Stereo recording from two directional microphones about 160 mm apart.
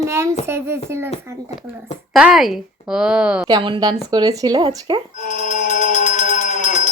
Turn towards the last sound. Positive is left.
turn(degrees=50)  # may be behind; listen again after turning